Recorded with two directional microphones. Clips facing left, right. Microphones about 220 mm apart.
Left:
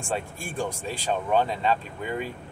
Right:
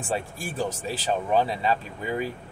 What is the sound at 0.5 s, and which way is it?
Speech, 5° right (ahead or behind).